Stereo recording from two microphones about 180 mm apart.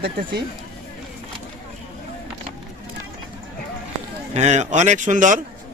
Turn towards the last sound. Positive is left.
turn(degrees=-45)  # may be behind; listen again after turning